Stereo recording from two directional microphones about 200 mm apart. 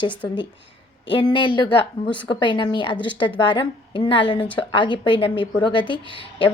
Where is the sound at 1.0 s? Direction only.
25° left (ahead or behind).